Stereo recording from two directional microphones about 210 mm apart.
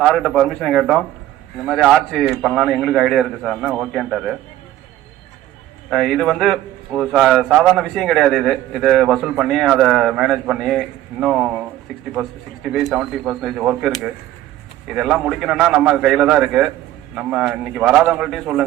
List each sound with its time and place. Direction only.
0.0 s a man's voice: centre (ahead or behind)
5.9 s a man's voice: centre (ahead or behind)